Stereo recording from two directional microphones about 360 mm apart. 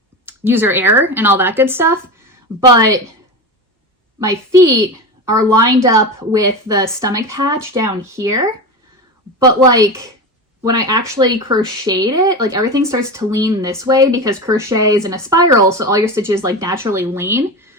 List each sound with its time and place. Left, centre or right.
0.3 s speech: centre
4.2 s speech: centre